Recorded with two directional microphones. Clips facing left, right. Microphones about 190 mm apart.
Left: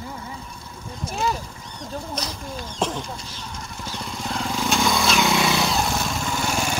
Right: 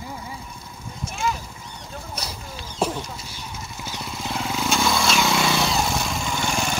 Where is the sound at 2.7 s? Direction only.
10° right (ahead or behind).